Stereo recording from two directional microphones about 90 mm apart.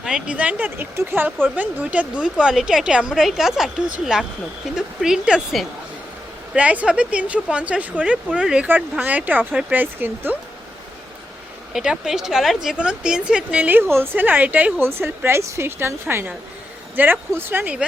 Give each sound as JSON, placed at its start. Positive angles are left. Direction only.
{"t": 0.0, "sound": "a woman's voice", "side_deg": -10}
{"t": 8.6, "sound": "speech", "side_deg": -20}
{"t": 11.7, "sound": "a woman's voice", "side_deg": -5}
{"t": 14.8, "sound": "speech", "side_deg": -30}